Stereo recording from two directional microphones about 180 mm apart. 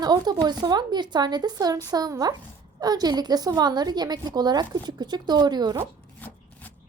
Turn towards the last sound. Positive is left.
turn(degrees=10)  # may be behind; listen again after turning